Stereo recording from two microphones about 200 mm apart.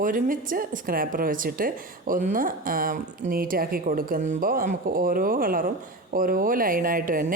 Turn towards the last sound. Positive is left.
turn(degrees=-45)  # may be behind; listen again after turning